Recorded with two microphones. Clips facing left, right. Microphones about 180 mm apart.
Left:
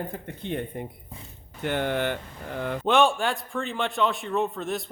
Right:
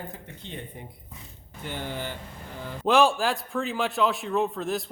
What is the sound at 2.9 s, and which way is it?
A man's voice, centre (ahead or behind).